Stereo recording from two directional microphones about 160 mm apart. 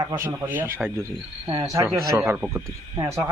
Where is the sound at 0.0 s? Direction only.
20° right (ahead or behind).